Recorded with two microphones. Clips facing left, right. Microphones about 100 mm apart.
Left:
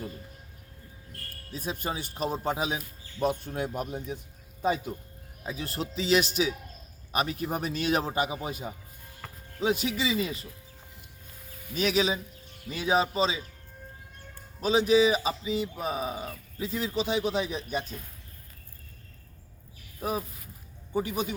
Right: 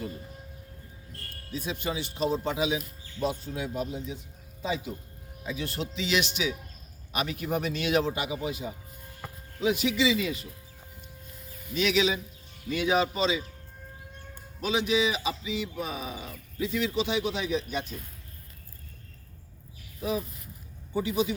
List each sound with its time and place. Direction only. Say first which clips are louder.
1.5 s speech: right 1 dB; 40° left (ahead or behind)
5.4 s speech: right 1 dB; 35° left (ahead or behind)
9.2 s music: right 2 dB; 15° right (ahead or behind)
9.6 s speech: right 2 dB; 35° left (ahead or behind)
11.7 s speech: right 1 dB; 40° left (ahead or behind)
14.6 s speech: left 4 dB; 35° left (ahead or behind)
20.0 s speech: right 1 dB; 45° left (ahead or behind)